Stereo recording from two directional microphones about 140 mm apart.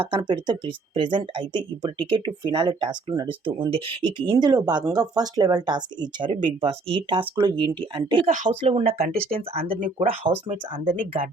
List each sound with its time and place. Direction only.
0.0 s speech: 35° right (ahead or behind)
10.8 s speech: 70° right (ahead or behind)